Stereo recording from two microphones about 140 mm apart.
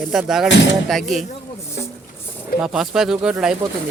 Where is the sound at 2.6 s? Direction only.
5° right (ahead or behind).